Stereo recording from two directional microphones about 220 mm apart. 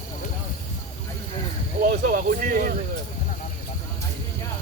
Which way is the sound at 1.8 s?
40° right (ahead or behind).